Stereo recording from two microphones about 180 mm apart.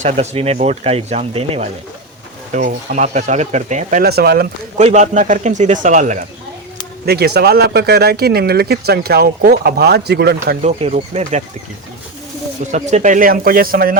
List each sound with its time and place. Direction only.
0.0 s speech: 35° right (ahead or behind)
2.5 s speech: 45° right (ahead or behind)
4.0 s speech: 60° right (ahead or behind)
4.8 s a man's voice: 40° right (ahead or behind)
7.0 s speech: 60° right (ahead or behind)
10.6 s speech: 35° right (ahead or behind)
12.7 s a man's voice: 40° right (ahead or behind)